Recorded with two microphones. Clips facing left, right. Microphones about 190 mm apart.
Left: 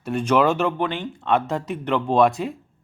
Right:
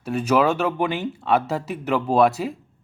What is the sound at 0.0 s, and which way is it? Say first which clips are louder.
A man's voice: even; 5° right (ahead or behind).